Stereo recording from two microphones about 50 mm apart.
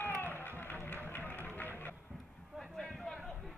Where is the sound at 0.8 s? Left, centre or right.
Left.